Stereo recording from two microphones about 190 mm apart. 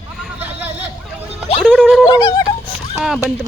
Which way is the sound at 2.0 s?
20° left (ahead or behind).